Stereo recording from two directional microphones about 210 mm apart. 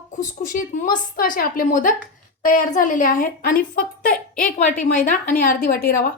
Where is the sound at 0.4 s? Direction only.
40° left (ahead or behind).